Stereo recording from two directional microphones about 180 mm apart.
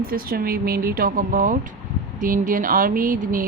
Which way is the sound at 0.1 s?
55° right (ahead or behind).